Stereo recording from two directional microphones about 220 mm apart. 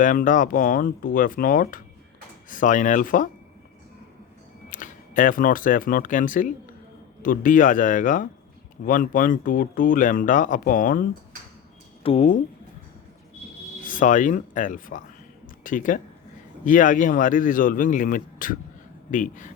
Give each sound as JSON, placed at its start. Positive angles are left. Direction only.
{"t": 0.0, "sound": "speech", "side_deg": 35}
{"t": 4.7, "sound": "speech", "side_deg": 35}
{"t": 12.0, "sound": "speech", "side_deg": 30}
{"t": 13.8, "sound": "speech", "side_deg": 35}